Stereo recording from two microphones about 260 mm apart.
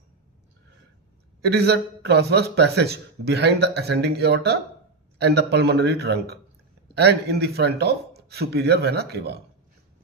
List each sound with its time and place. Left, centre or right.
1.4 s a man's voice: right